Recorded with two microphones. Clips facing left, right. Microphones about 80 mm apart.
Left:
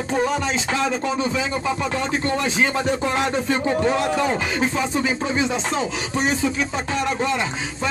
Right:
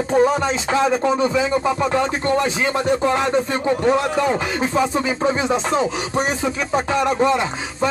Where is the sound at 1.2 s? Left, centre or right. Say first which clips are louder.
Right 5 dB; right.